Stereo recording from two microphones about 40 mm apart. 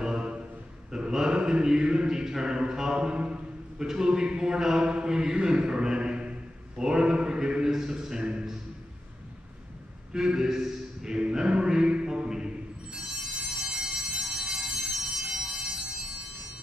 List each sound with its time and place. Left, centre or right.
0.0 s a sound: right
0.9 s a man's voice: centre
10.1 s a man's voice: centre
12.9 s train: centre
13.7 s bell: centre
14.7 s a sound: centre
15.1 s bell: centre